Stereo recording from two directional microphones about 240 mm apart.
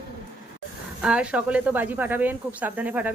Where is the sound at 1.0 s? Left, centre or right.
Centre.